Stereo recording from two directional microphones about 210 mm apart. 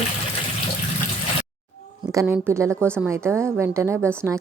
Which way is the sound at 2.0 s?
15° right (ahead or behind).